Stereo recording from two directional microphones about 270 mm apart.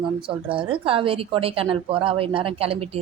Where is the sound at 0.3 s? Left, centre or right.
Centre.